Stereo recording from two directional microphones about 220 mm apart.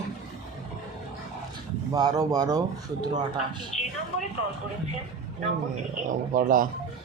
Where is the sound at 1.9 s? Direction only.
15° right (ahead or behind).